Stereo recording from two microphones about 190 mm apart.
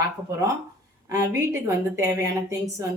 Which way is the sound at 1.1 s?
15° right (ahead or behind).